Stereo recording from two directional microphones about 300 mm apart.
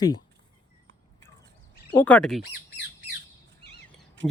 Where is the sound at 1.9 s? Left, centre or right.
Centre.